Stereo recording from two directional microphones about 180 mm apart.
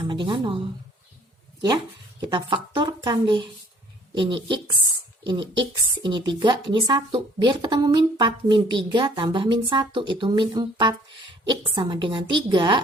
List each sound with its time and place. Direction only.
0.0 s a woman's voice: 25° right (ahead or behind)
2.2 s a woman's voice: 25° right (ahead or behind)